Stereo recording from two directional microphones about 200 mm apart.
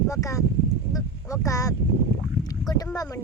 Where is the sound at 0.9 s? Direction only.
15° left (ahead or behind).